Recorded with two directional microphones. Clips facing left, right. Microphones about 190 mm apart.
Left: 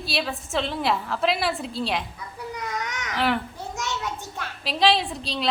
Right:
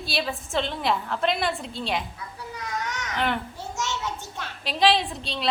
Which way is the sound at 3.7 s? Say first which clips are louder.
Even; 15° left (ahead or behind).